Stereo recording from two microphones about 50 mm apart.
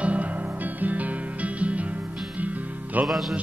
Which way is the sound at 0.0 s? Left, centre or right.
Right.